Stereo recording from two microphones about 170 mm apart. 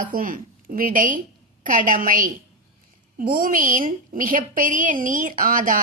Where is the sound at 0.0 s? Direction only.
55° right (ahead or behind).